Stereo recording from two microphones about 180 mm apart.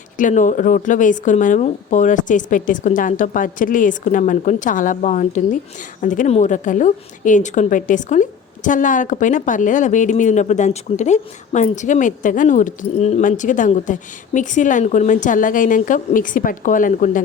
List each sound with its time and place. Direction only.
0.2 s a woman's voice: 45° left (ahead or behind)